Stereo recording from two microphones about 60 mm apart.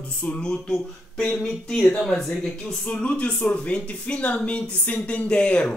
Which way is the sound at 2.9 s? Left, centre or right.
Centre.